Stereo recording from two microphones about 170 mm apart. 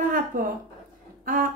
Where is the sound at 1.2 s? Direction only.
55° right (ahead or behind).